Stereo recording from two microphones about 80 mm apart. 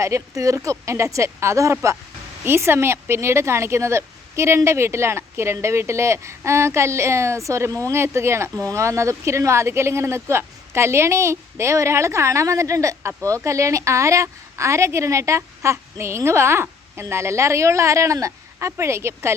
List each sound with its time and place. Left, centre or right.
0.0 s speech: right